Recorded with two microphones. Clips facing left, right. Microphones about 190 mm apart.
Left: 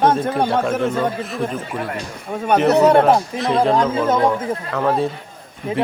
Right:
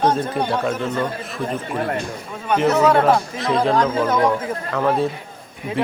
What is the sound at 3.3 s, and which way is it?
Speech, centre (ahead or behind).